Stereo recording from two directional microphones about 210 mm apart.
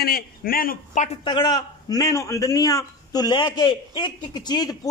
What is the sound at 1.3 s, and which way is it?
A man's voice, 20° left (ahead or behind).